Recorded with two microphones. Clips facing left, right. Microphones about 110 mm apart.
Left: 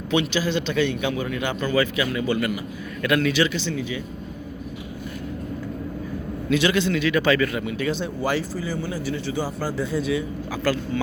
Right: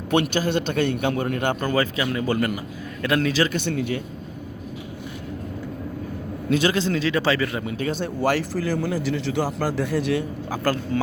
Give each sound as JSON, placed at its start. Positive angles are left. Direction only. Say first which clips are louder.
{"t": 0.1, "sound": "a man's voice", "louder": "right 2 dB", "side_deg": -50}
{"t": 3.0, "sound": "speech", "louder": "left 1 dB", "side_deg": -30}
{"t": 3.5, "sound": "speech", "louder": "right 2 dB", "side_deg": -55}
{"t": 6.5, "sound": "speech", "louder": "even", "side_deg": -40}
{"t": 8.0, "sound": "speech", "louder": "right 2 dB", "side_deg": -65}
{"t": 10.5, "sound": "a man's voice", "louder": "right 1 dB", "side_deg": -45}